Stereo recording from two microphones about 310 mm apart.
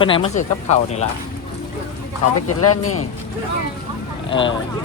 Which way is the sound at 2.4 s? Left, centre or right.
Left.